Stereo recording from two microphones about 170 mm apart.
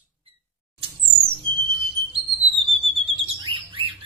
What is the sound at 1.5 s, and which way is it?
Music, 30° right (ahead or behind).